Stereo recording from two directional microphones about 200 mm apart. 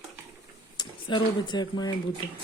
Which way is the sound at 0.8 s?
25° left (ahead or behind).